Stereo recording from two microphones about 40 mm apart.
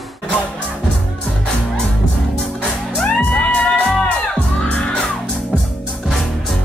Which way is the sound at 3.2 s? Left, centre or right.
Left.